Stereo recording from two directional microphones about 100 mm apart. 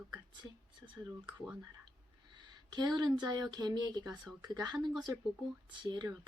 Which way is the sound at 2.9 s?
45° right (ahead or behind).